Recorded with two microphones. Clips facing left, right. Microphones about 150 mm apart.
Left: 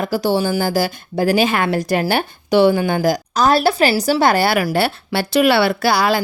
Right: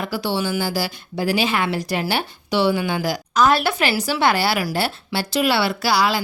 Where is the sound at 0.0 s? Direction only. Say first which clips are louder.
Left 6 dB; 40° left (ahead or behind).